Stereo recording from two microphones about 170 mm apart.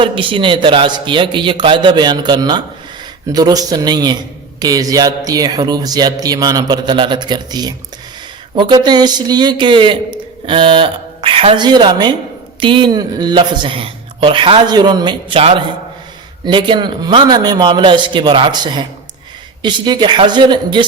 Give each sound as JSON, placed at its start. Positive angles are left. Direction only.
{"t": 0.0, "sound": "a man's voice", "side_deg": -30}